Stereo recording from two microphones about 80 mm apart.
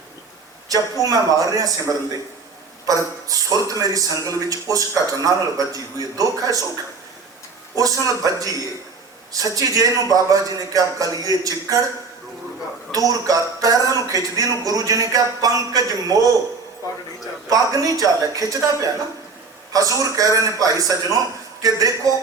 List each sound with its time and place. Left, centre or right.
0.7 s a man's voice: right
2.8 s a man's voice: right
7.8 s a man's voice: right
12.9 s a man's voice: right
17.5 s a man's voice: right